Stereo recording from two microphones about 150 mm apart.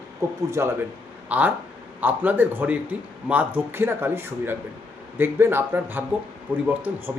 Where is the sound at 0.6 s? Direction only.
20° right (ahead or behind).